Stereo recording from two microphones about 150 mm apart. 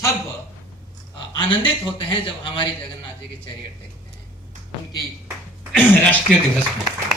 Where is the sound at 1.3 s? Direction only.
35° left (ahead or behind).